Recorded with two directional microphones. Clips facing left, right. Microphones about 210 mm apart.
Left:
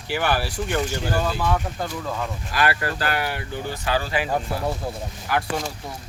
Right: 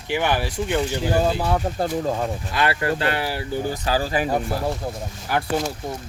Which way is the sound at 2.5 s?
25° right (ahead or behind).